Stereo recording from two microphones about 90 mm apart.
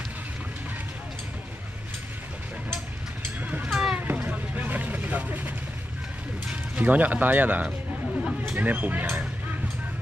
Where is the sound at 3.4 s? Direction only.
20° right (ahead or behind).